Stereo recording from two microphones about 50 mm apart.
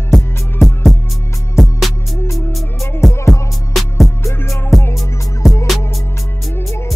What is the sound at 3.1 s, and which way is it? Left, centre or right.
Music, left.